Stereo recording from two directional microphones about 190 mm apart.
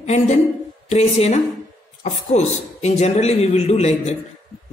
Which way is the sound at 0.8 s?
35° left (ahead or behind).